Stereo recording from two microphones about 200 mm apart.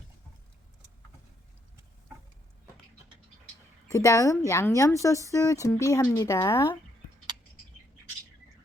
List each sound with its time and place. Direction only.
3.8 s a woman's voice: 15° left (ahead or behind)